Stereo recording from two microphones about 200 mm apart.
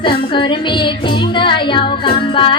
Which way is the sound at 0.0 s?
25° left (ahead or behind).